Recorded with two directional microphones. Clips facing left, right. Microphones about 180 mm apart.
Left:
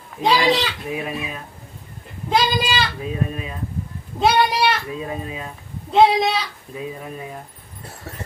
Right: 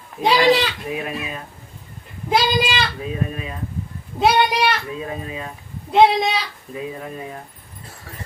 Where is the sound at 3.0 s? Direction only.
Centre (ahead or behind).